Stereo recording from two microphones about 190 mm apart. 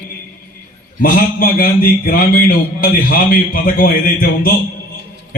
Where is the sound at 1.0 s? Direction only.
50° left (ahead or behind).